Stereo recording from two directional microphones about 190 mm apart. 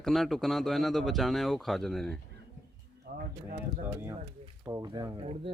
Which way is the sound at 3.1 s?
55° right (ahead or behind).